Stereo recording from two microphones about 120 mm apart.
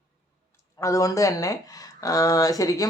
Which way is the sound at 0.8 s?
25° left (ahead or behind).